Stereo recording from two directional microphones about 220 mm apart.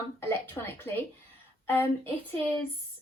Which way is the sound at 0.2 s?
10° left (ahead or behind).